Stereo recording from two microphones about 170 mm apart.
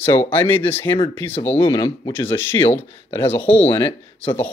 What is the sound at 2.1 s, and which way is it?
Speech, 15° left (ahead or behind).